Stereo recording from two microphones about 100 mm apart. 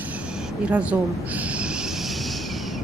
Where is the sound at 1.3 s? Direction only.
15° right (ahead or behind).